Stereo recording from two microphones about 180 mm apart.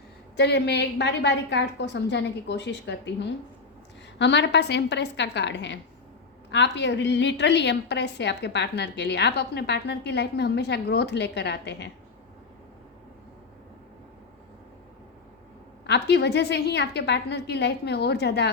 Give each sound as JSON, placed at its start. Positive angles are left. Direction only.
{"t": 0.3, "sound": "a woman's voice", "side_deg": 70}
{"t": 15.9, "sound": "a woman's voice", "side_deg": 70}